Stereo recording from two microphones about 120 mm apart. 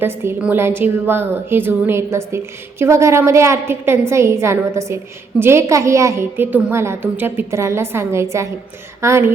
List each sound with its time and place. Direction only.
0.0 s a woman's voice: 20° right (ahead or behind)